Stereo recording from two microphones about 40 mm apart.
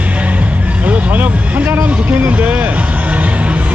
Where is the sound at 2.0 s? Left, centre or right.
Right.